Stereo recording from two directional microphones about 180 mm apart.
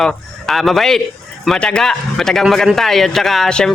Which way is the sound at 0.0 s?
Centre (ahead or behind).